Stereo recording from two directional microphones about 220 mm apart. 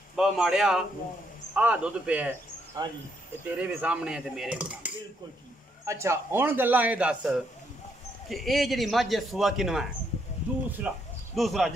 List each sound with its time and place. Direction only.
0.1 s a man's voice: centre (ahead or behind)